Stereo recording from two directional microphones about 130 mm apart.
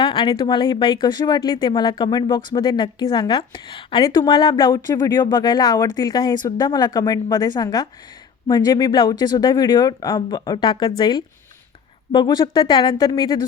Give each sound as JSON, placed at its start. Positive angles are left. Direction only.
{"t": 0.0, "sound": "speech", "side_deg": 40}